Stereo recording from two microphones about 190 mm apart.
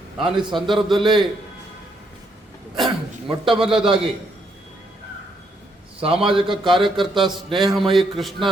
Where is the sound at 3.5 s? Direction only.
5° right (ahead or behind).